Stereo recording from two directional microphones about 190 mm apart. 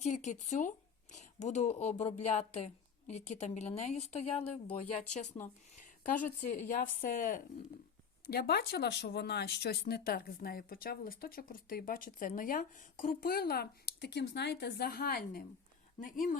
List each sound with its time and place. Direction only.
0.0 s a woman's voice: 40° left (ahead or behind)
5.7 s speech: 45° left (ahead or behind)
8.3 s speech: 55° left (ahead or behind)